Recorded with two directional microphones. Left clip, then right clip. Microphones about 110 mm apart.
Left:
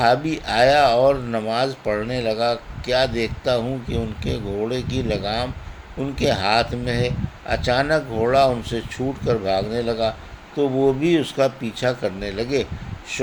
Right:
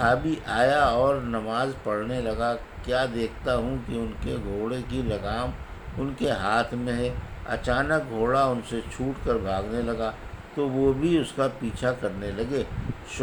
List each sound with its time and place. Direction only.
0.0 s speech: 65° left (ahead or behind)